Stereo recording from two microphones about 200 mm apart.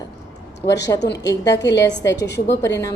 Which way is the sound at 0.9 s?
60° left (ahead or behind).